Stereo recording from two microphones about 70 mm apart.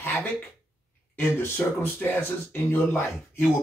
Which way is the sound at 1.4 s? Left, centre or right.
Left.